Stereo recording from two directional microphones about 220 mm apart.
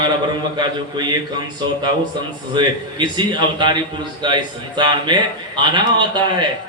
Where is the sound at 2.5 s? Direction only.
20° right (ahead or behind).